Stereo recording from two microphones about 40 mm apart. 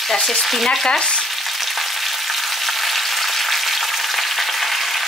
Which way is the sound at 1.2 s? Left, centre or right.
Centre.